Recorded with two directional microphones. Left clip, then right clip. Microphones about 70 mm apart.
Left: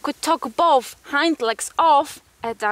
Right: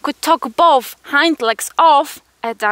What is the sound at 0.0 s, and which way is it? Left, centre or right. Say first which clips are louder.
Speech: right 6 dB; right.